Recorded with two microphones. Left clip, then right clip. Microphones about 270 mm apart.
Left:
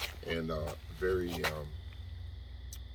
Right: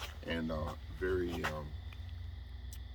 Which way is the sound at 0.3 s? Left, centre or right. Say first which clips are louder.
Left 1 dB; centre.